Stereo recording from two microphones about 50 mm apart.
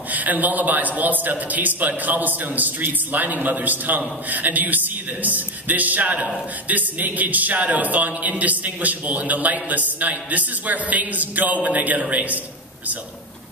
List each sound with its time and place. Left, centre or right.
0.1 s speech: right